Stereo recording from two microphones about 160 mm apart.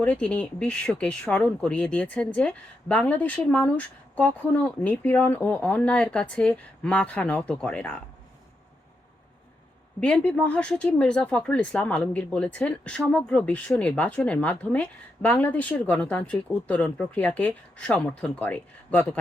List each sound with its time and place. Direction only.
0.0 s speech: 10° left (ahead or behind)
10.0 s speech: 5° left (ahead or behind)